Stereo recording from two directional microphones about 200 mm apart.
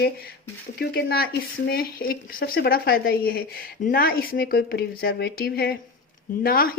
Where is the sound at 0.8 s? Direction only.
50° left (ahead or behind).